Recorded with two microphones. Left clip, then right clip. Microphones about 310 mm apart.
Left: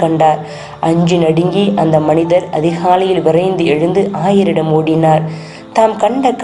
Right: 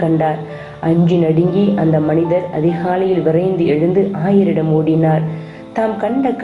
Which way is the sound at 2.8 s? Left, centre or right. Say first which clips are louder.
Left 6 dB; left.